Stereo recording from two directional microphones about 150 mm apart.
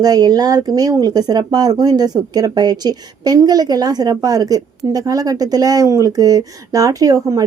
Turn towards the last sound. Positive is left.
turn(degrees=-25)  # may be behind; listen again after turning